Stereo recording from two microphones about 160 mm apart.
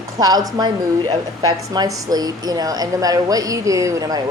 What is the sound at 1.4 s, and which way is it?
Speech, 25° right (ahead or behind).